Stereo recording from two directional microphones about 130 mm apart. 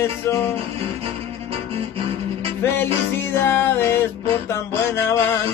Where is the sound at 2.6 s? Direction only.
15° left (ahead or behind).